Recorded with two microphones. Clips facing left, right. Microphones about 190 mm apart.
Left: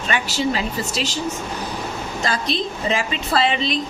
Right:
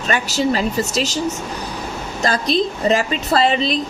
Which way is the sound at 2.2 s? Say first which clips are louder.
Right 6 dB; 40° right (ahead or behind).